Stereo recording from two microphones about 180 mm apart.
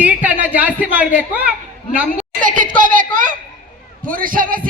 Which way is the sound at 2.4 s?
50° right (ahead or behind).